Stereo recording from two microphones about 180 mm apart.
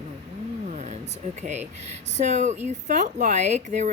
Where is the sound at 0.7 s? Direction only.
40° right (ahead or behind).